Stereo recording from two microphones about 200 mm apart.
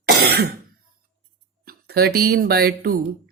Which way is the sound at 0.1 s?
55° right (ahead or behind).